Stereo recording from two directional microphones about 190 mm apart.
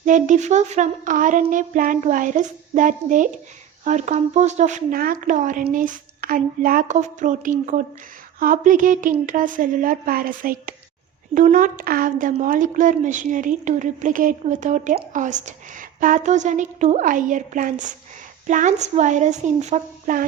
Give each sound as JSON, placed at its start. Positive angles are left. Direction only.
{"t": 0.0, "sound": "a woman's voice", "side_deg": -40}